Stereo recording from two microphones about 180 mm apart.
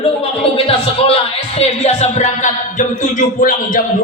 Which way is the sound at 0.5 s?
30° left (ahead or behind).